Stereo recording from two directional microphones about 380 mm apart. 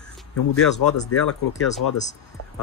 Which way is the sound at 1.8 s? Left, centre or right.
Left.